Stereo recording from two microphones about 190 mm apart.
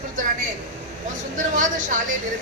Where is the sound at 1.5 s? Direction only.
40° right (ahead or behind).